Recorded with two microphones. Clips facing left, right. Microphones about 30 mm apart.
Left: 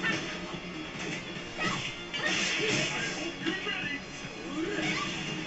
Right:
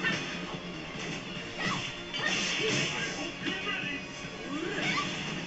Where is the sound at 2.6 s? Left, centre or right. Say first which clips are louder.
Left 1 dB; left.